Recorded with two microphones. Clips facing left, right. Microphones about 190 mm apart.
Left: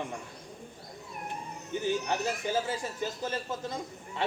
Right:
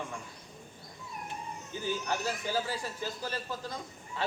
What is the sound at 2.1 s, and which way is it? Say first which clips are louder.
A man's voice: left 3 dB; 20° left (ahead or behind).